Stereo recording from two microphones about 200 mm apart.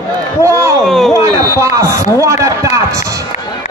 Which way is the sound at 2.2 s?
15° right (ahead or behind).